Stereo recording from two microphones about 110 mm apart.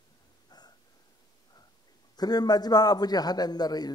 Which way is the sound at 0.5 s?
35° left (ahead or behind).